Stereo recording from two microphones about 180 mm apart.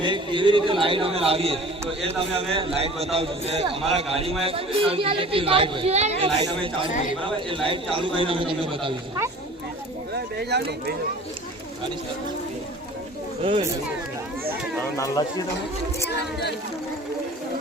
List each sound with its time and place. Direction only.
0.0 s a man's voice: 25° right (ahead or behind)
10.2 s speech: 65° right (ahead or behind)
14.9 s speech: 20° left (ahead or behind)
16.0 s speech: 70° left (ahead or behind)